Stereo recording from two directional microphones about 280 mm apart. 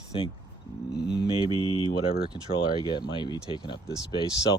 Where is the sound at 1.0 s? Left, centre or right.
Left.